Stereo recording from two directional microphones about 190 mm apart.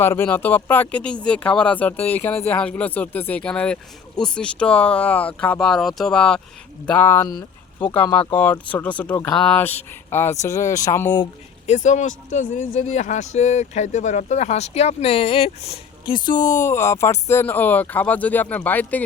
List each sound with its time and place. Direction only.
0.0 s speech: 10° left (ahead or behind)
11.6 s speech: 40° left (ahead or behind); by 19.0 s 10° left (ahead or behind)